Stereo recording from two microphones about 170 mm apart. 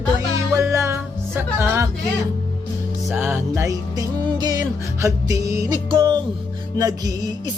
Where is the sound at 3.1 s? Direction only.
10° right (ahead or behind).